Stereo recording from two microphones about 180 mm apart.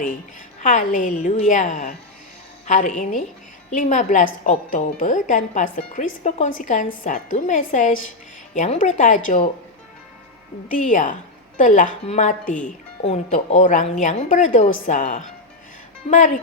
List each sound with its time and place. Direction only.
0.6 s a woman's voice: 45° left (ahead or behind)
10.7 s a woman's voice: 45° left (ahead or behind)